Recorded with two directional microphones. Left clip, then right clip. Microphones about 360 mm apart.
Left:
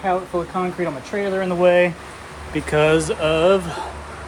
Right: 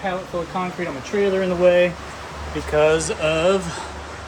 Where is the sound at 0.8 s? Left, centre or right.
Centre.